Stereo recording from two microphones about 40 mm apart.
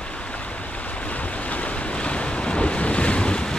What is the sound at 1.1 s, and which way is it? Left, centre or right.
Waves, left.